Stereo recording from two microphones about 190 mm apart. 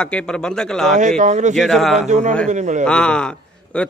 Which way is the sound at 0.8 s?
40° right (ahead or behind).